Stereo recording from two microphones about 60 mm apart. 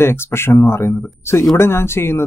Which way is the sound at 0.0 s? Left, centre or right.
Left.